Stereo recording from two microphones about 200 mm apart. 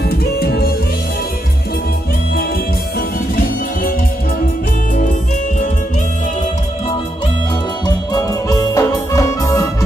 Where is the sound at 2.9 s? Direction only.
50° left (ahead or behind).